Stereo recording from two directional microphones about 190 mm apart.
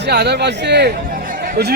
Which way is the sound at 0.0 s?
60° right (ahead or behind).